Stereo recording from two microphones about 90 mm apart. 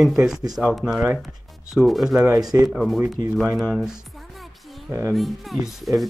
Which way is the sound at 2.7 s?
Centre (ahead or behind).